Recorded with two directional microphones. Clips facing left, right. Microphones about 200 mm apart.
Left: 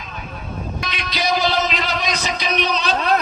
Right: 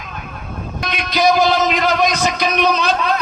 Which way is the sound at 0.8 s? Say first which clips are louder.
Right 10 dB; 50° right (ahead or behind).